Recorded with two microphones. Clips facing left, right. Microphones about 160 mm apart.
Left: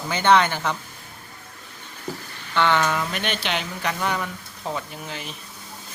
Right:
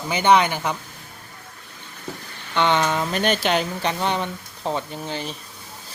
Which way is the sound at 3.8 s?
25° right (ahead or behind).